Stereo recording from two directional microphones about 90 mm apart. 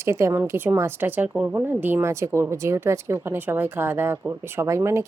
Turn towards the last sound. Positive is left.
turn(degrees=-30)  # may be behind; listen again after turning